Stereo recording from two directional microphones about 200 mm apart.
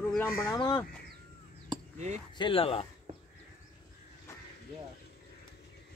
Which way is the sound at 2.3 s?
25° left (ahead or behind).